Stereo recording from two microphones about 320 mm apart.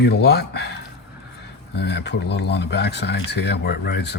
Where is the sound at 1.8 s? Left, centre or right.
Left.